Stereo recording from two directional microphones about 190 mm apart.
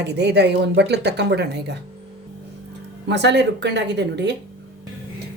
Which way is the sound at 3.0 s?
65° right (ahead or behind).